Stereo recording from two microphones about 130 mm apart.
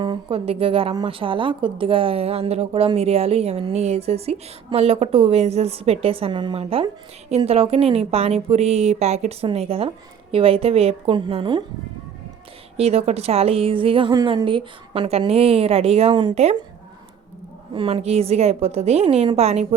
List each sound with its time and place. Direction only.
0.0 s a woman's voice: 40° right (ahead or behind)
12.7 s a woman's voice: 50° right (ahead or behind)
16.3 s speech: 55° right (ahead or behind)
17.7 s a woman's voice: 45° right (ahead or behind)